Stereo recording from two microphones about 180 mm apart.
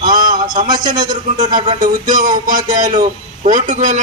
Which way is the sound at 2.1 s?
50° right (ahead or behind).